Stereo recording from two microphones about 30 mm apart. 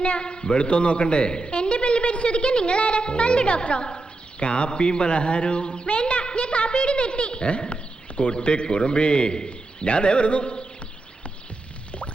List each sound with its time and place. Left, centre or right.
0.0 s a man's voice: left